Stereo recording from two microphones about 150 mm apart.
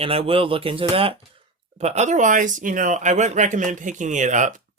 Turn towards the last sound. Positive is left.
turn(degrees=-55)  # may be behind; listen again after turning